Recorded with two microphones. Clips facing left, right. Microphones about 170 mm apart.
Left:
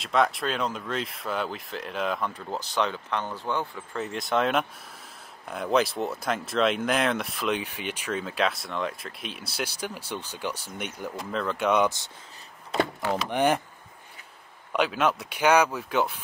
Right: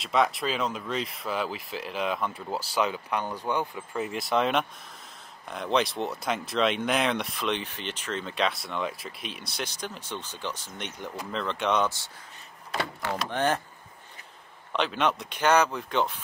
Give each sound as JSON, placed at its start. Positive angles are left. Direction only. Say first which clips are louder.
{"t": 0.0, "sound": "speech", "louder": "left 1 dB", "side_deg": 0}
{"t": 14.7, "sound": "speech", "louder": "left 2 dB", "side_deg": 5}